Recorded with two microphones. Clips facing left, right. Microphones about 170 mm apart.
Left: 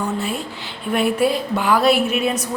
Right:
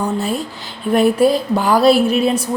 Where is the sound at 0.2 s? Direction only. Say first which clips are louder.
Right 4 dB; 40° right (ahead or behind).